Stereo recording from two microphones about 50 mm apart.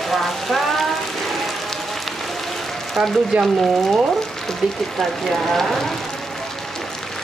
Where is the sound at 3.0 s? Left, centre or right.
Centre.